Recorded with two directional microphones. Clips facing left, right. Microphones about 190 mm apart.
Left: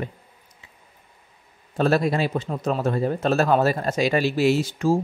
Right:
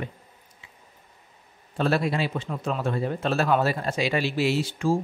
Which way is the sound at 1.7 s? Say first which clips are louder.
Left 4 dB; 40° left (ahead or behind).